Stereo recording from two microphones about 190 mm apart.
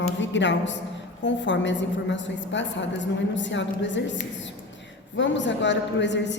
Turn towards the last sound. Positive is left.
turn(degrees=70)  # may be behind; listen again after turning